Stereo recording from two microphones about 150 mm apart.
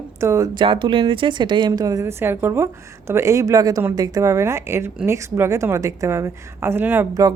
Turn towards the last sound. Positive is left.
turn(degrees=-10)  # may be behind; listen again after turning